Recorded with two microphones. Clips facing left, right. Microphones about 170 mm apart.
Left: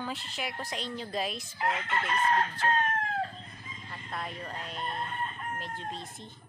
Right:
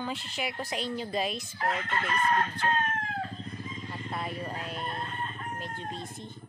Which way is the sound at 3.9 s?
5° right (ahead or behind).